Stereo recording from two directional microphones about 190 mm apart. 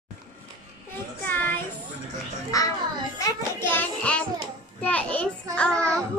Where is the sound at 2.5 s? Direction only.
20° left (ahead or behind).